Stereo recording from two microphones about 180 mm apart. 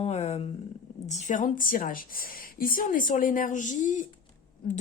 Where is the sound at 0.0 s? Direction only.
35° left (ahead or behind).